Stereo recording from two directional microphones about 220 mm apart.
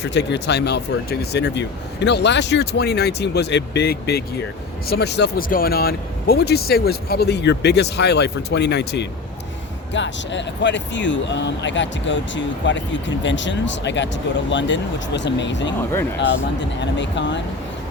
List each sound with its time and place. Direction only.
0.0 s speech: 55° left (ahead or behind)